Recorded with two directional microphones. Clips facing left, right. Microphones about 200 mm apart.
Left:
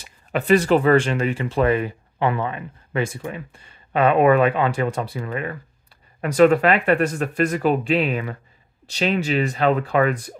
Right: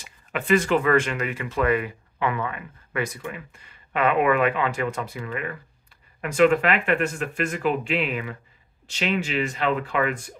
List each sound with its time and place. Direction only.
0.0 s speech: 35° left (ahead or behind)